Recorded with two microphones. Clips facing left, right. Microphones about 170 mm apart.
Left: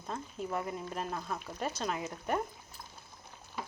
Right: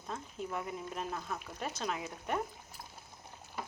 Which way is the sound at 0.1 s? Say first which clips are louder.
Left 3 dB; centre (ahead or behind).